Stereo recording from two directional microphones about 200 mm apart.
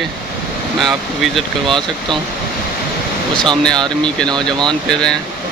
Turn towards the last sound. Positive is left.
turn(degrees=5)  # may be behind; listen again after turning